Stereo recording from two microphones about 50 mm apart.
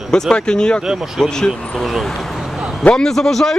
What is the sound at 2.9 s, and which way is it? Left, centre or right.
Speech, centre.